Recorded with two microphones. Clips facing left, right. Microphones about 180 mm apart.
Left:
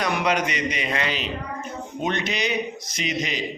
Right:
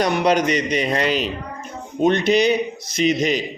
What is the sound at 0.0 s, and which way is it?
A man's voice, 35° right (ahead or behind).